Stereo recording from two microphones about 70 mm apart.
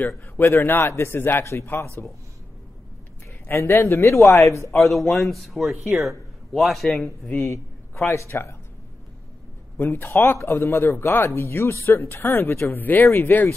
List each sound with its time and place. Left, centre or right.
0.4 s a man's voice: left
1.4 s a man's voice: left
3.4 s a man's voice: left
4.7 s speech: centre
7.3 s a man's voice: left
9.8 s a man's voice: left